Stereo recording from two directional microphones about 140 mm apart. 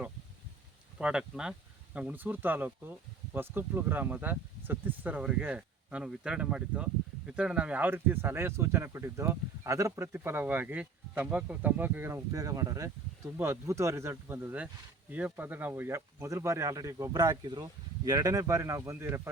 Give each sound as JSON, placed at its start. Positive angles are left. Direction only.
{"t": 0.9, "sound": "speech", "side_deg": -5}